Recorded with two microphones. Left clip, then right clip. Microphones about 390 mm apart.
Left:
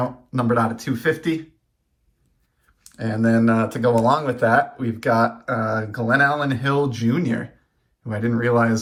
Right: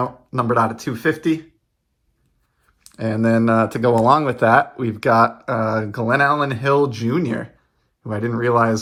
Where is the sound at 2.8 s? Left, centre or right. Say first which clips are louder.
Right 2 dB; centre.